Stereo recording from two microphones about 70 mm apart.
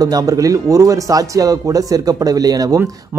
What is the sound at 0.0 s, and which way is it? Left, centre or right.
Speech, right.